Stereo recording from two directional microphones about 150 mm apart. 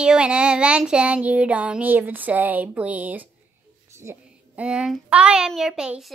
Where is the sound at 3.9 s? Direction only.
15° right (ahead or behind).